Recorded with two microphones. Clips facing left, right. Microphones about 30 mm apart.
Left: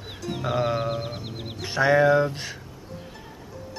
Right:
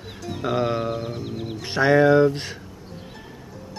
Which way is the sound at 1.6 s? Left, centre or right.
Centre.